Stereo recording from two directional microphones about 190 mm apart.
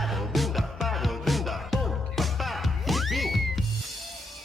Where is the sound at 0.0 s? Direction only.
Centre (ahead or behind).